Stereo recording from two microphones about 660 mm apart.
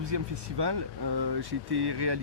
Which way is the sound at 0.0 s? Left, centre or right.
Right.